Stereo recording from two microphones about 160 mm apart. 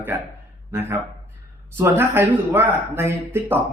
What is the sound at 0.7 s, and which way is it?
Speech, 15° right (ahead or behind).